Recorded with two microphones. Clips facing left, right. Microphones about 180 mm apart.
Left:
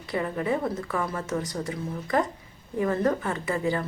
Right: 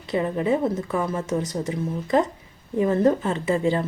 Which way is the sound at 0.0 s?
20° right (ahead or behind).